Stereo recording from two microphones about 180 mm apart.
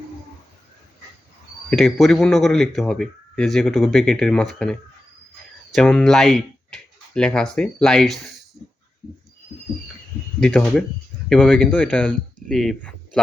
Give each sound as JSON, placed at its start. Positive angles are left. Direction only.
{"t": 1.7, "sound": "speech", "side_deg": 0}
{"t": 10.4, "sound": "speech", "side_deg": 5}